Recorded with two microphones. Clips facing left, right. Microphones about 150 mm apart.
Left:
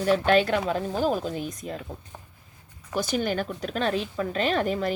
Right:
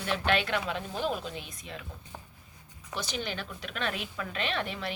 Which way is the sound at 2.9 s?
50° left (ahead or behind).